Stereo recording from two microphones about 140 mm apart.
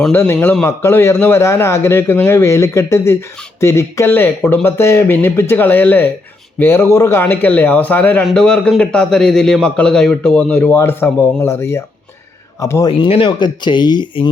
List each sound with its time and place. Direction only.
0.1 s a man's voice: 15° left (ahead or behind)
13.0 s speech: 35° left (ahead or behind)